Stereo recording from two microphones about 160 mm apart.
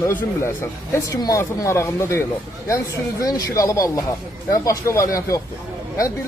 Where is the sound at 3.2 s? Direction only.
20° left (ahead or behind).